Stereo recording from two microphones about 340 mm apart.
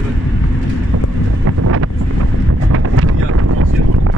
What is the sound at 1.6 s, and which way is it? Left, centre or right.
Wind noise, right.